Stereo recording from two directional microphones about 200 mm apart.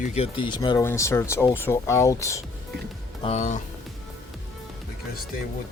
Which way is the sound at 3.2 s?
35° left (ahead or behind).